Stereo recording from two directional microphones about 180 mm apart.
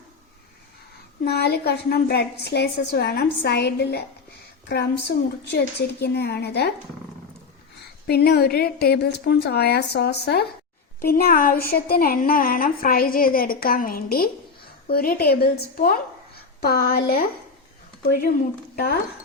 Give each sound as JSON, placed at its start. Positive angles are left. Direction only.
{"t": 1.2, "sound": "a woman's voice", "side_deg": 60}
{"t": 8.0, "sound": "a woman's voice", "side_deg": 60}